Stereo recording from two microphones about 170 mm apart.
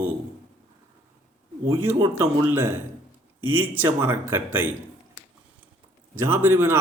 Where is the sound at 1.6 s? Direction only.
15° right (ahead or behind).